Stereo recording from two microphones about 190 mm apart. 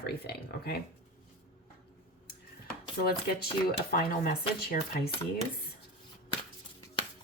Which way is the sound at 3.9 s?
50° left (ahead or behind).